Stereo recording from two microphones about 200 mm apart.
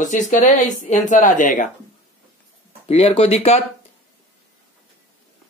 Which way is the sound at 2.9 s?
30° left (ahead or behind).